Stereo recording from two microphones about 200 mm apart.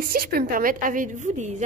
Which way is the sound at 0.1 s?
50° right (ahead or behind).